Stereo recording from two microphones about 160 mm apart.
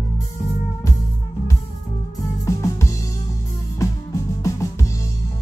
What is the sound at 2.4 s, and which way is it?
Music, 20° left (ahead or behind).